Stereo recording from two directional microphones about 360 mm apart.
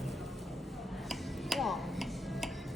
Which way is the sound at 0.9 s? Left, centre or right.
Centre.